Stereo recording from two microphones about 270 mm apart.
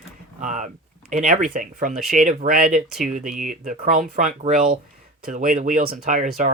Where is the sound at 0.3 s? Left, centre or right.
Right.